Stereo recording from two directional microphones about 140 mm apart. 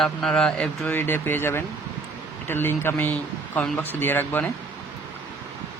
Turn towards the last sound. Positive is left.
turn(degrees=15)  # may be behind; listen again after turning